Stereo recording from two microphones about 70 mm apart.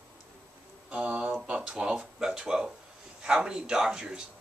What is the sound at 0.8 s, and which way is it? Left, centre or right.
Speech, centre.